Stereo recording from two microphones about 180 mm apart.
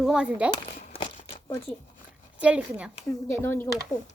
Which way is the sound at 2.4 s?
5° right (ahead or behind).